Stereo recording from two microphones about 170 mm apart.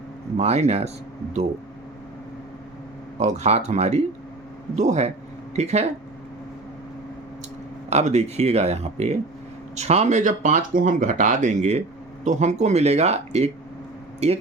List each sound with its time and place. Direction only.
0.3 s speech: 40° right (ahead or behind)
3.2 s speech: 40° right (ahead or behind)
7.9 s speech: 40° right (ahead or behind)